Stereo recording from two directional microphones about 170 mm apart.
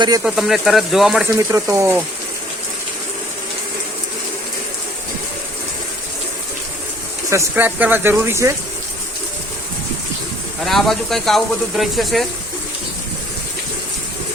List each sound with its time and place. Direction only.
0.2 s speech: centre (ahead or behind)
1.3 s speech: 15° right (ahead or behind)
7.3 s speech: 15° right (ahead or behind)
10.7 s speech: centre (ahead or behind)